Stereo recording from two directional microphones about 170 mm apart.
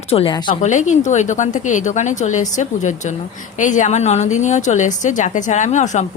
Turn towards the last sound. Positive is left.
turn(degrees=45)  # may be behind; listen again after turning